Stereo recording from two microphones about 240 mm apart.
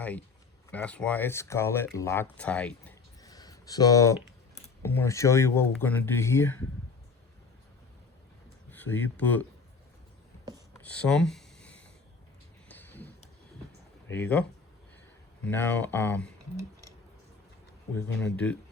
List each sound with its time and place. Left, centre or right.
0.0 s speech: centre
3.2 s a sound: centre
4.8 s speech: centre
8.7 s speech: centre
10.8 s a sound: centre
14.1 s speech: centre
15.4 s speech: centre
17.9 s speech: centre